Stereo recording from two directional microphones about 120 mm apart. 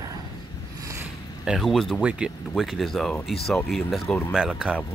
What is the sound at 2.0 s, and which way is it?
Speech, 10° right (ahead or behind).